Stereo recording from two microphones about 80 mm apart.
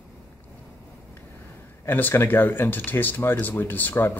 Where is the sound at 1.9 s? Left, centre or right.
Left.